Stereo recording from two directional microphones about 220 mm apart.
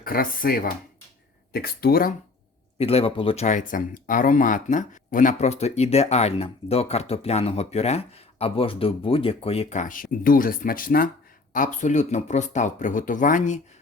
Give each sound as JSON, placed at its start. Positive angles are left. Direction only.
{"t": 0.0, "sound": "speech", "side_deg": 40}
{"t": 2.7, "sound": "speech", "side_deg": 25}